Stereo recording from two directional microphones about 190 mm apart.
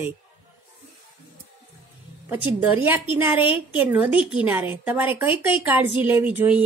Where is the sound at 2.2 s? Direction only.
10° right (ahead or behind).